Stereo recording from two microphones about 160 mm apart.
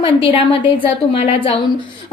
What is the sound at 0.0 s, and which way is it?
A woman's voice, 35° left (ahead or behind).